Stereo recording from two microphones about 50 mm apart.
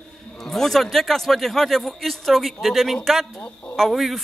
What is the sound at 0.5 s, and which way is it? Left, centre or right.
Speech, centre.